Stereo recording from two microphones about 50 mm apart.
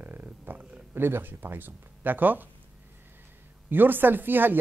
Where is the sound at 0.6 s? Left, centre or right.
Right.